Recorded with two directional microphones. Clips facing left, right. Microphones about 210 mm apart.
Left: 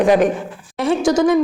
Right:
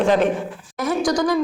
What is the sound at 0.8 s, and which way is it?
Speech, 25° left (ahead or behind).